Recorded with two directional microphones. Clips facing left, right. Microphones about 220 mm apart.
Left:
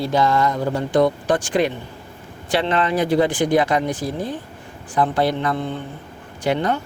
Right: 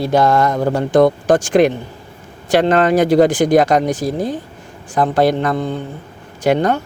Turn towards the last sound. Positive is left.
turn(degrees=-45)  # may be behind; listen again after turning